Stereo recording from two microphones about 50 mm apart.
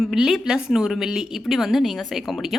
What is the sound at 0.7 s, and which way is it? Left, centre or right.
A woman's voice, centre.